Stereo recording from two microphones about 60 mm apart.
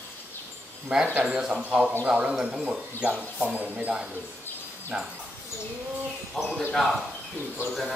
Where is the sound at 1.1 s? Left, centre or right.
Centre.